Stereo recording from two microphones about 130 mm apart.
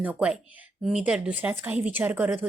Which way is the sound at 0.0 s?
10° right (ahead or behind).